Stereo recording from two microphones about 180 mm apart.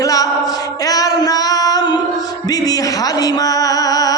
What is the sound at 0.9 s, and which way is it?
Female singing, 20° left (ahead or behind).